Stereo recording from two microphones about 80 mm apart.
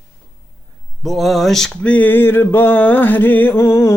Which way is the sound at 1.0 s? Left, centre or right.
Centre.